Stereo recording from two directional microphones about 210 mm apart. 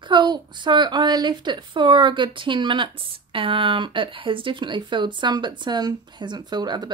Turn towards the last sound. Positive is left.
turn(degrees=-20)  # may be behind; listen again after turning